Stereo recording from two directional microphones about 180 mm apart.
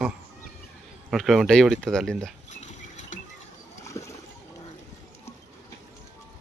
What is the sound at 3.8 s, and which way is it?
Rowboat, 15° left (ahead or behind).